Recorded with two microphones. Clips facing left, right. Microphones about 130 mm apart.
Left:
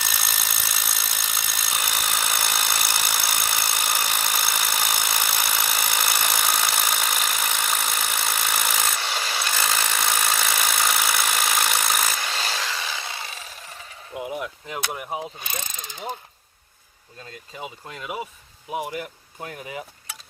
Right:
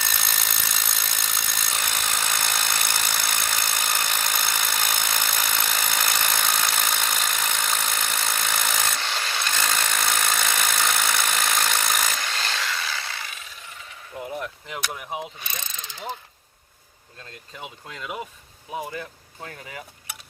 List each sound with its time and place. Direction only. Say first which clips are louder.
0.0 s tools: even; 5° left (ahead or behind); by 13.8 s 35° left (ahead or behind)
14.1 s a sound: left 2 dB; 15° left (ahead or behind)
15.4 s speech: left 3 dB; 50° left (ahead or behind)
17.6 s speech: left 2 dB; 5° left (ahead or behind); by 19.8 s 20° left (ahead or behind)